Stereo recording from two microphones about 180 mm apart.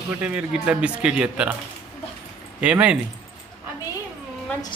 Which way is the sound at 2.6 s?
5° right (ahead or behind).